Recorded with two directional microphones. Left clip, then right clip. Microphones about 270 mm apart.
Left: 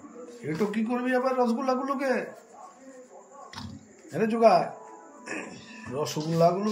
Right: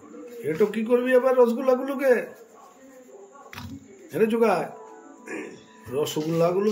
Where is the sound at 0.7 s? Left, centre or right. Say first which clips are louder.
Right 7 dB; centre.